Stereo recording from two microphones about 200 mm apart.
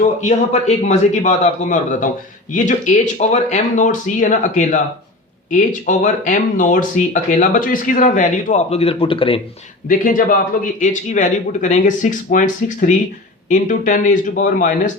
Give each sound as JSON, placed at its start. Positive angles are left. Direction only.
{"t": 0.2, "sound": "speech", "side_deg": 35}
{"t": 9.9, "sound": "speech", "side_deg": 45}